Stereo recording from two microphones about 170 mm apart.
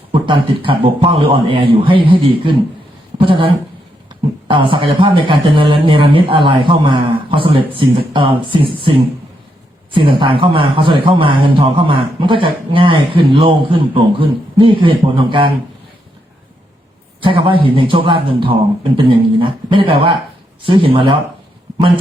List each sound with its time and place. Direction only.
0.1 s a man's voice: 30° right (ahead or behind)
17.2 s a man's voice: 30° right (ahead or behind)